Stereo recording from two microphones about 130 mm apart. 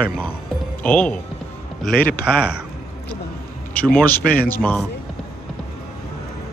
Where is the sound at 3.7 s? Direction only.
10° left (ahead or behind).